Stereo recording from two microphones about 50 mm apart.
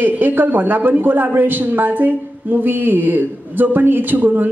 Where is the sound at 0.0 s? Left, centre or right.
Right.